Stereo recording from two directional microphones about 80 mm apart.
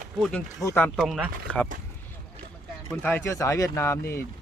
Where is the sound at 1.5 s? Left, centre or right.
Centre.